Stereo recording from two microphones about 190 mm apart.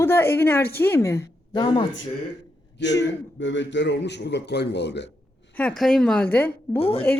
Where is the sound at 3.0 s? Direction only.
75° left (ahead or behind).